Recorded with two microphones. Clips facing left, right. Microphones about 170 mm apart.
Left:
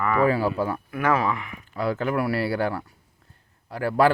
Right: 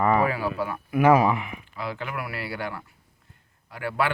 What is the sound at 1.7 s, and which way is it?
Speech, 40° left (ahead or behind).